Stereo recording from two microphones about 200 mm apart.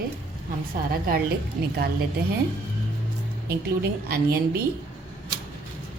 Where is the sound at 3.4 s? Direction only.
50° right (ahead or behind).